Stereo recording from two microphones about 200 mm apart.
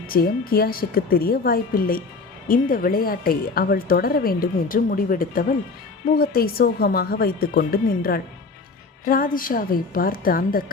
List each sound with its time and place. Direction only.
0.1 s speech: 50° left (ahead or behind)